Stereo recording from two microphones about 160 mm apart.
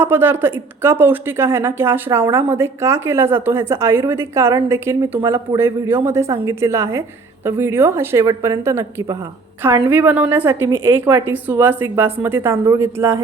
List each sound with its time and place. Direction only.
0.0 s speech: 15° right (ahead or behind)